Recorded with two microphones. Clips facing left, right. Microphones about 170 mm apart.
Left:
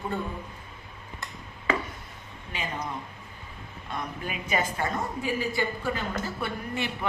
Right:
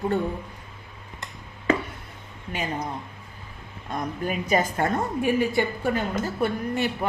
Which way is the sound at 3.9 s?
45° right (ahead or behind).